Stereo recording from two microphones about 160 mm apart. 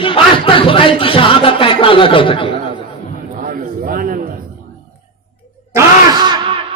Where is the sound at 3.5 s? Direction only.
60° right (ahead or behind).